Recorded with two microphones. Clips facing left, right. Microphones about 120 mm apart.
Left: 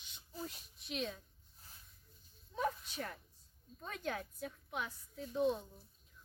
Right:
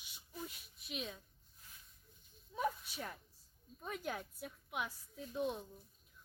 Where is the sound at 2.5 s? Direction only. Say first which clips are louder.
Left 1 dB; 5° right (ahead or behind).